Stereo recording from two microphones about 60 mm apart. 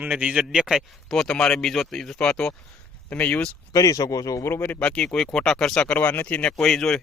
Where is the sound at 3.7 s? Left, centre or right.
Left.